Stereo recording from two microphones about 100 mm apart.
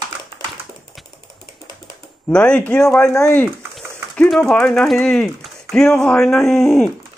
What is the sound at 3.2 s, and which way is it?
Speech, 20° left (ahead or behind).